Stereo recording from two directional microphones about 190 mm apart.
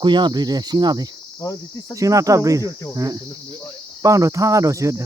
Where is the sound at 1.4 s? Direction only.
15° left (ahead or behind).